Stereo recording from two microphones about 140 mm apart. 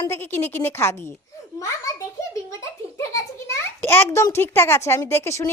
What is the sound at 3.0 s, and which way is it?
A child's voice, 20° left (ahead or behind).